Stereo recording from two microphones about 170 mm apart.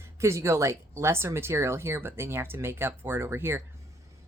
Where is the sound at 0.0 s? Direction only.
15° right (ahead or behind).